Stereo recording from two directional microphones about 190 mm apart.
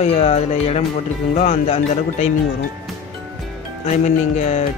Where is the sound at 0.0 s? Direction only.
35° left (ahead or behind).